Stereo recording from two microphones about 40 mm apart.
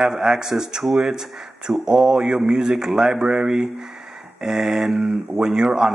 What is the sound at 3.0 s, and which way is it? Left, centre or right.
Speech, right.